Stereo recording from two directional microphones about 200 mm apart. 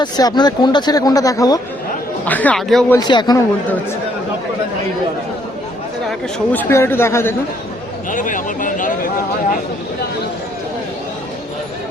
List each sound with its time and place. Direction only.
0.0 s speech: 20° left (ahead or behind); by 3.0 s centre (ahead or behind)
3.0 s speech: 20° left (ahead or behind)
6.5 s speech: 10° left (ahead or behind)
8.1 s speech: 40° left (ahead or behind)